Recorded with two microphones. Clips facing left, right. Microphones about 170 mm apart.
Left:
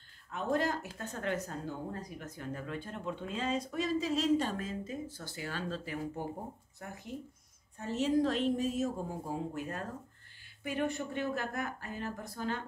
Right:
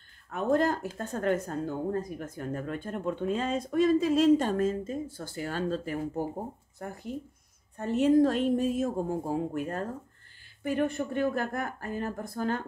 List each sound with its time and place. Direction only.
0.3 s speech: 50° right (ahead or behind)
7.7 s speech: 55° right (ahead or behind)